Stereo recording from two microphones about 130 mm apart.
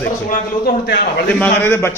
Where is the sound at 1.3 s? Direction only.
15° left (ahead or behind).